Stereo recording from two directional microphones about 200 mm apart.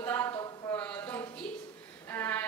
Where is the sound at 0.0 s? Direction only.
10° left (ahead or behind).